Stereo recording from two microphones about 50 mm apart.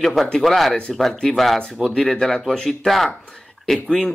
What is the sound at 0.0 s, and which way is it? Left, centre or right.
Speech, centre.